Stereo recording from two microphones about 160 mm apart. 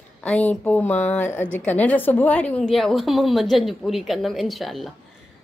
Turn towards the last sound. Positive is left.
turn(degrees=0)  # may be behind; listen again after turning